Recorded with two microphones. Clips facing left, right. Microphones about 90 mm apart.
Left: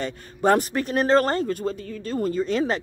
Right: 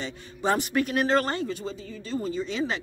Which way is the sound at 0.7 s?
35° left (ahead or behind).